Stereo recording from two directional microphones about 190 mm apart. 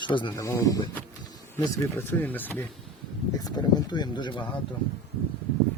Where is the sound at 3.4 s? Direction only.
20° left (ahead or behind).